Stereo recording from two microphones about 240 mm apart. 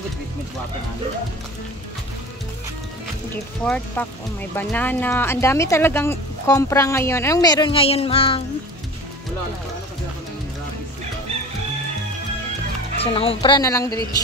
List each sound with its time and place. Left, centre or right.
3.6 s speech: centre; by 8.5 s left
12.9 s speech: left